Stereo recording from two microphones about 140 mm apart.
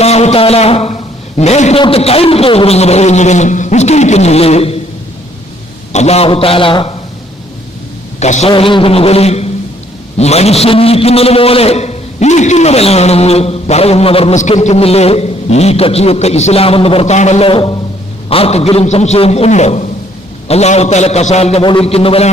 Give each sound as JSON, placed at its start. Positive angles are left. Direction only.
{"t": 0.0, "sound": "a sound", "side_deg": 50}
{"t": 1.8, "sound": "a man's voice", "side_deg": 45}
{"t": 5.9, "sound": "a man's voice", "side_deg": 50}
{"t": 8.2, "sound": "a man's voice", "side_deg": 55}
{"t": 8.4, "sound": "a man's voice", "side_deg": 40}
{"t": 21.6, "sound": "a man's voice", "side_deg": 40}